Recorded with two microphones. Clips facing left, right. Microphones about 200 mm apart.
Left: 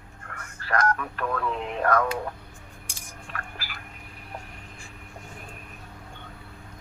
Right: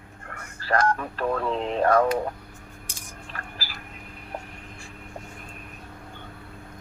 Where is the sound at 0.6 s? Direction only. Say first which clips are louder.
Right 2 dB; 30° right (ahead or behind).